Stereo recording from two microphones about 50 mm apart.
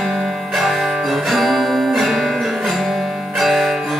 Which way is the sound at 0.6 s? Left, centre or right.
Centre.